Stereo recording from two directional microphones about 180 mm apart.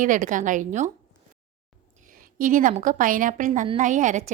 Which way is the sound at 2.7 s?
45° right (ahead or behind).